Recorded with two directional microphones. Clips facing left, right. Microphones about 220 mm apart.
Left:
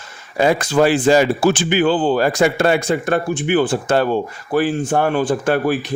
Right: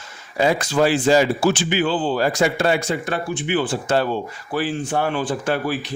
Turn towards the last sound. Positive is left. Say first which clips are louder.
# left 5 dB
turn(degrees=50)  # may be behind; listen again after turning